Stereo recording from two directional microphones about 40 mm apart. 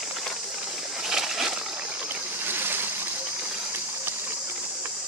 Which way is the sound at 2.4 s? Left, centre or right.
Right.